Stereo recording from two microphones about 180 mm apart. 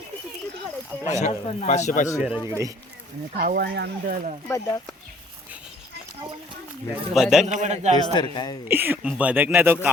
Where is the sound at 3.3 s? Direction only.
65° right (ahead or behind).